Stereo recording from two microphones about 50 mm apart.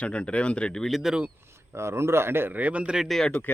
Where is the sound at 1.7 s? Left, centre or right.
Right.